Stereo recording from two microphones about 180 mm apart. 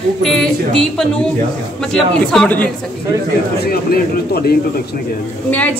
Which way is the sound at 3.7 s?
60° left (ahead or behind).